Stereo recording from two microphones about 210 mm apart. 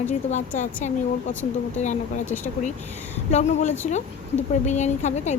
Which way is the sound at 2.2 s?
10° left (ahead or behind).